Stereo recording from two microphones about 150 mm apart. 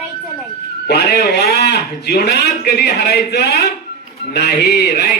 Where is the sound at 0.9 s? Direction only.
90° left.